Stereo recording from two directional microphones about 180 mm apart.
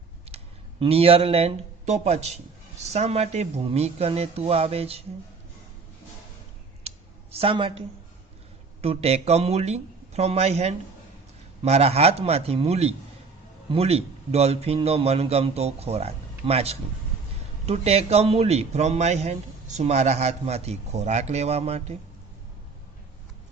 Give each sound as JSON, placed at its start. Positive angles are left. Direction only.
{"t": 0.8, "sound": "a man's voice", "side_deg": -35}
{"t": 6.8, "sound": "clicking", "side_deg": -35}
{"t": 8.8, "sound": "a man's voice", "side_deg": -35}